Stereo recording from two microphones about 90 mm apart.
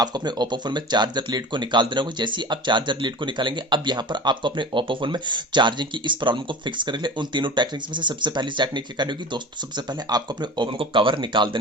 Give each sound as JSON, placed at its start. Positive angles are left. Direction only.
{"t": 0.0, "sound": "speech", "side_deg": -50}